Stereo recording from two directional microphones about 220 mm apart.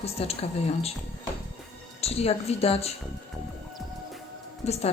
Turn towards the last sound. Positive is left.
turn(degrees=30)  # may be behind; listen again after turning